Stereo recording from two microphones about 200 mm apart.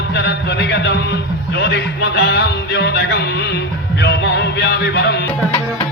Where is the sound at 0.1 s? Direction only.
55° left (ahead or behind).